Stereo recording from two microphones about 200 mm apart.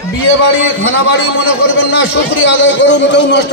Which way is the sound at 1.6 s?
70° left (ahead or behind).